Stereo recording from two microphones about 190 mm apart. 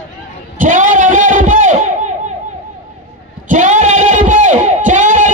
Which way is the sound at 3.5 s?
40° right (ahead or behind).